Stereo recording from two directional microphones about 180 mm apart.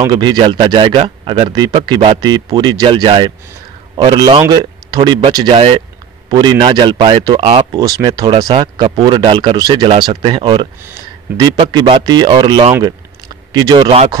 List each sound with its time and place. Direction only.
0.0 s speech: 25° right (ahead or behind)
7.8 s speech: 20° right (ahead or behind)